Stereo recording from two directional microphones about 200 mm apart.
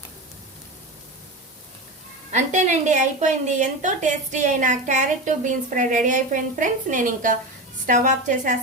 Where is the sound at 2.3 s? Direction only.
35° right (ahead or behind).